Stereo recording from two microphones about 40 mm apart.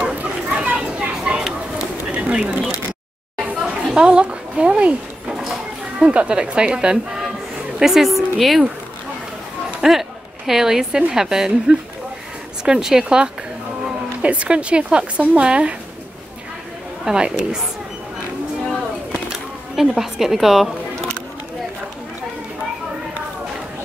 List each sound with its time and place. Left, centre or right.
0.1 s a sound: right
1.3 s a sound: right
2.1 s bird: right
3.7 s a sound: right
4.0 s a woman's voice: right
5.9 s a woman's voice: right
7.8 s a woman's voice: centre
9.8 s a woman's voice: centre
14.2 s a woman's voice: right
17.0 s a woman's voice: centre
19.9 s a woman's voice: centre